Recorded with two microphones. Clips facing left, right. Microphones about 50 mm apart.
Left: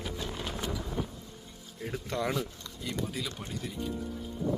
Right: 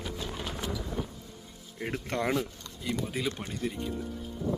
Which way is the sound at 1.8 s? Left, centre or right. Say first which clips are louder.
Right 2 dB; right.